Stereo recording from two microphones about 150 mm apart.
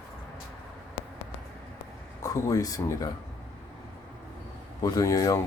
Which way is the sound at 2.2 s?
20° left (ahead or behind).